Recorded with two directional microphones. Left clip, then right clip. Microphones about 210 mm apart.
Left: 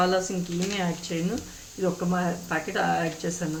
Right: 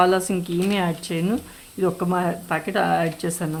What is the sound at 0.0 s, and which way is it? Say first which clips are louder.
Speech: right 5 dB; 55° right (ahead or behind).